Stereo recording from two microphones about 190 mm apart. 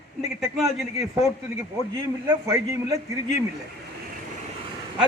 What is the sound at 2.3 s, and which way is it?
Speech, 15° right (ahead or behind).